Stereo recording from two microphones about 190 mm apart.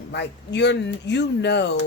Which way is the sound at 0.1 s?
65° left (ahead or behind).